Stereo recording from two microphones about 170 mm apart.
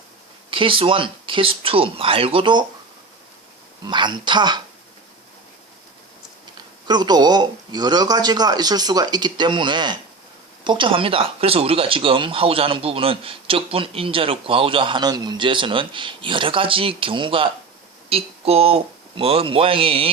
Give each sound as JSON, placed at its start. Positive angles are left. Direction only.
{"t": 0.5, "sound": "speech", "side_deg": -30}
{"t": 3.8, "sound": "a man's voice", "side_deg": -25}
{"t": 6.8, "sound": "a man's voice", "side_deg": -25}